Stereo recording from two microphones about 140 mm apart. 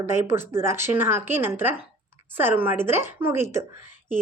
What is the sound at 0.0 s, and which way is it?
Speech, 15° right (ahead or behind).